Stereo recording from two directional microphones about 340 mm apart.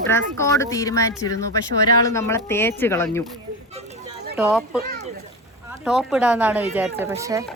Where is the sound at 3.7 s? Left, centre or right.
Centre.